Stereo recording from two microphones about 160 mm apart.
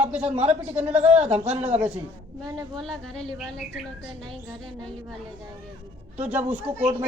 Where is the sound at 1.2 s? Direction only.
40° right (ahead or behind).